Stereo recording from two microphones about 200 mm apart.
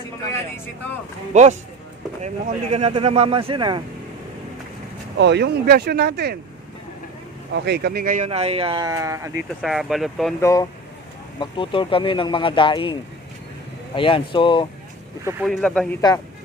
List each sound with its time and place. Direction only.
1.3 s speech: 35° right (ahead or behind)
5.1 s speech: 60° right (ahead or behind)
7.6 s speech: 55° right (ahead or behind)
8.3 s speech: 30° right (ahead or behind); by 9.3 s 15° right (ahead or behind)
9.6 s speech: centre (ahead or behind)
10.4 s speech: 15° left (ahead or behind)
15.2 s speech: 10° right (ahead or behind)
15.4 s speech: 5° left (ahead or behind)
16.0 s speech: 15° left (ahead or behind)